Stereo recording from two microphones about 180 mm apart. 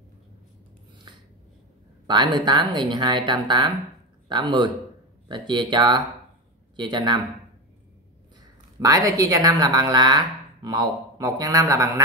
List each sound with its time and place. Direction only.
2.0 s speech: 25° right (ahead or behind)
8.7 s speech: 20° right (ahead or behind)